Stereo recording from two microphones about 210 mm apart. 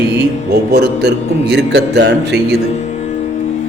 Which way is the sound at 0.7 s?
50° right (ahead or behind).